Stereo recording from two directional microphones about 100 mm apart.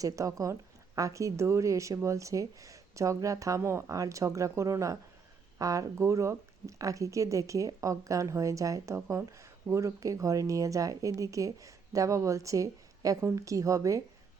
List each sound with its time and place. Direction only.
0.0 s speech: 35° right (ahead or behind)